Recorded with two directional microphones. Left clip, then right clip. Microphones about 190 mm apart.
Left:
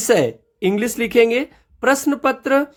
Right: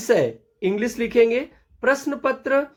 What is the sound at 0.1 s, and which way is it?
Speech, 40° left (ahead or behind).